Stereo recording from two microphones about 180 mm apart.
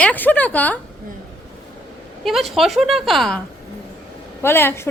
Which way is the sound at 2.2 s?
Centre (ahead or behind).